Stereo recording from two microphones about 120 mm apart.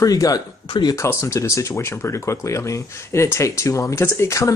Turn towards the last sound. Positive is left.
turn(degrees=25)  # may be behind; listen again after turning